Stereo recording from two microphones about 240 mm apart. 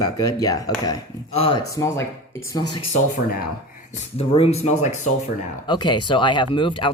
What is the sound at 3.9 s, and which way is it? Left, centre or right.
Speech, left.